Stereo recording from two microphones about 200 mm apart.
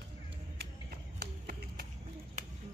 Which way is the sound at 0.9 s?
50° right (ahead or behind).